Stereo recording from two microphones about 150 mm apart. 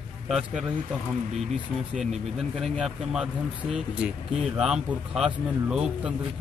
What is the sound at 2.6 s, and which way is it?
Speech, centre (ahead or behind).